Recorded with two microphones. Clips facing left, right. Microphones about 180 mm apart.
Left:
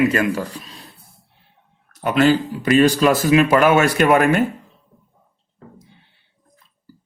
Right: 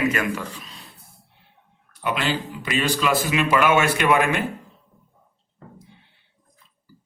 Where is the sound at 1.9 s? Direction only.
40° left (ahead or behind).